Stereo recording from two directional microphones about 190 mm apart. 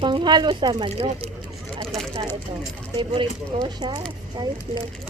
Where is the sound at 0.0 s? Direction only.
25° right (ahead or behind).